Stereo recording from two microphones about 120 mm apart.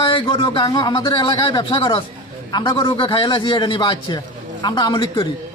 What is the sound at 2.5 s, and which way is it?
Speech, 35° left (ahead or behind).